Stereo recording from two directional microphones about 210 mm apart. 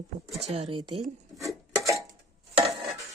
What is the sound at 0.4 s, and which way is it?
Speech, 30° right (ahead or behind).